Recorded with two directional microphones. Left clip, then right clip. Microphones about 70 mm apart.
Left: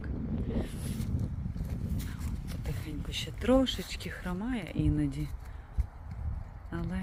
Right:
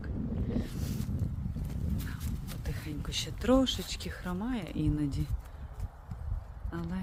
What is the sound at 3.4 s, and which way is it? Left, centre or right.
Speech, right.